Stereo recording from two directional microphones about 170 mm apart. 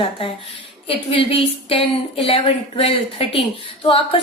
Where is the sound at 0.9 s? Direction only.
30° left (ahead or behind).